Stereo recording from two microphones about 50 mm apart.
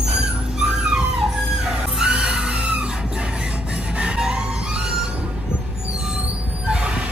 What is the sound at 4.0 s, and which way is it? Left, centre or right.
Music, centre.